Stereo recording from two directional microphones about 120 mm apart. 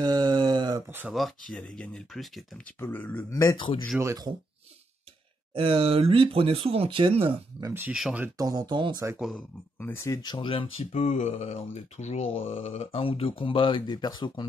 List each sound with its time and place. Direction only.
0.0 s a sound: 35° right (ahead or behind)
0.8 s speech: 15° right (ahead or behind)
1.1 s speech: 5° left (ahead or behind)
2.6 s speech: 15° left (ahead or behind)
3.5 s speech: 45° left (ahead or behind)
4.0 s speech: 25° right (ahead or behind)
5.5 s speech: 50° right (ahead or behind)
7.6 s speech: 20° right (ahead or behind)
7.9 s speech: 5° right (ahead or behind)
8.4 s speech: 30° right (ahead or behind)
9.2 s speech: 5° left (ahead or behind)
9.8 s speech: 20° left (ahead or behind)
10.2 s speech: 40° left (ahead or behind)